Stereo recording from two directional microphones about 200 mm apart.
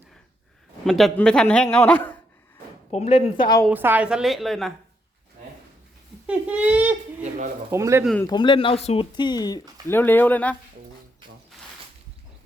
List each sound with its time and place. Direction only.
0.9 s a man's voice: centre (ahead or behind)
2.9 s speech: 30° left (ahead or behind)
3.7 s a man's voice: 10° right (ahead or behind)
6.2 s speech: 5° right (ahead or behind)
7.2 s dishes: 40° right (ahead or behind)
7.7 s speech: 15° right (ahead or behind)
8.0 s a man's voice: 5° left (ahead or behind)
8.3 s speech: 25° left (ahead or behind); by 10.6 s 5° left (ahead or behind)